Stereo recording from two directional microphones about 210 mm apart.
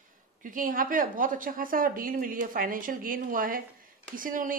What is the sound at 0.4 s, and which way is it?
Speech, 40° right (ahead or behind).